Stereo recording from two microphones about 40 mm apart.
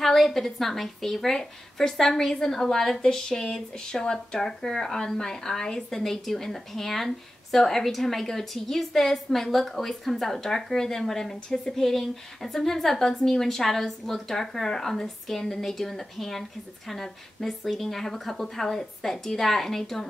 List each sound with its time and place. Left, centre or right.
0.0 s speech: centre
5.9 s speech: centre